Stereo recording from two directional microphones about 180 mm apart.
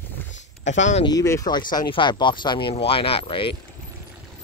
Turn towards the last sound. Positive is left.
turn(degrees=30)  # may be behind; listen again after turning